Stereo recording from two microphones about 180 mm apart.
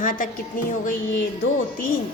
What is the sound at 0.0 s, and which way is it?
A woman's voice, 50° left (ahead or behind).